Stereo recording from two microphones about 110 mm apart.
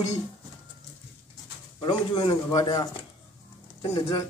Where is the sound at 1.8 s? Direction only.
40° left (ahead or behind).